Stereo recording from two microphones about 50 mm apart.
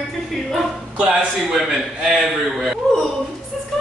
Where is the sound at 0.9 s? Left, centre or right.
Right.